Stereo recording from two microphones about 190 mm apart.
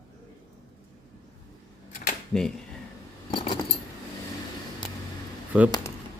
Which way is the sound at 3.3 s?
25° left (ahead or behind).